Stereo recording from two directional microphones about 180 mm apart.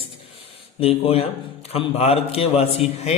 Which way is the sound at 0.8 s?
35° left (ahead or behind).